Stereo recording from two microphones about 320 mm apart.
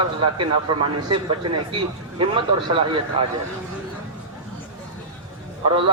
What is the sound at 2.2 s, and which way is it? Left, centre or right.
A man's voice, centre.